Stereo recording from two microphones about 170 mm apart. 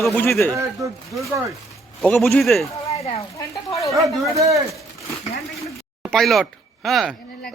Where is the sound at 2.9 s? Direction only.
40° left (ahead or behind).